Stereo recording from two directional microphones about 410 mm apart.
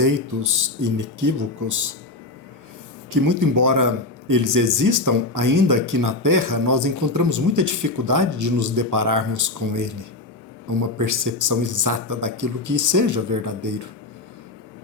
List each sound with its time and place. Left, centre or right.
0.0 s a man's voice: right
3.1 s a man's voice: right
10.9 s a man's voice: right